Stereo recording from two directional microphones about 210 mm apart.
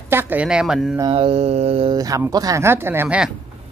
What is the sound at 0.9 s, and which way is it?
A man's voice, 25° right (ahead or behind).